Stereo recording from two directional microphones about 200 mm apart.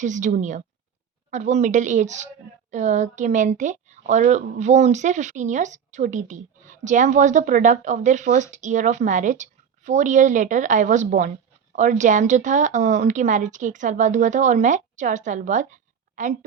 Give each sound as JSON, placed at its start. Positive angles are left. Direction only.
{"t": 0.0, "sound": "a woman's voice", "side_deg": -40}